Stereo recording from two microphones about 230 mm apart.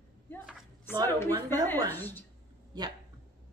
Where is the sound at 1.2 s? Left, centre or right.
Centre.